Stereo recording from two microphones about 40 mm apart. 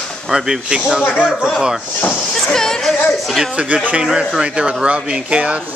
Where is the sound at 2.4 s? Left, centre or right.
Centre.